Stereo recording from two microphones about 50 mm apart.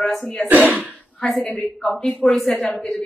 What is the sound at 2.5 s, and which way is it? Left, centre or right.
Speech, left.